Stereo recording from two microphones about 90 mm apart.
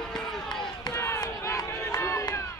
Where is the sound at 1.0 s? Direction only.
30° left (ahead or behind).